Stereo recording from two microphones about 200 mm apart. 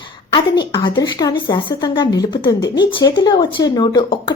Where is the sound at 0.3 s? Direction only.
20° left (ahead or behind).